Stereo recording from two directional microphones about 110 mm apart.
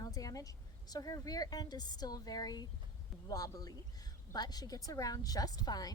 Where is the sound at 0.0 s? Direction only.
30° left (ahead or behind).